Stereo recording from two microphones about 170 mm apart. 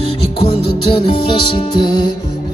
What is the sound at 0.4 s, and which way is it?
Music, 35° left (ahead or behind).